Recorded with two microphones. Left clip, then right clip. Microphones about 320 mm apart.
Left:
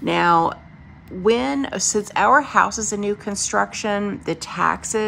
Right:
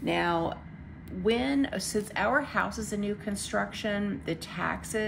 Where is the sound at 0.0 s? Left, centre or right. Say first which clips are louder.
Left 11 dB; centre.